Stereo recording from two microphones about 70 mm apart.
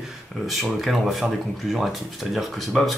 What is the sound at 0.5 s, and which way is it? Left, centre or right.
Speech, centre.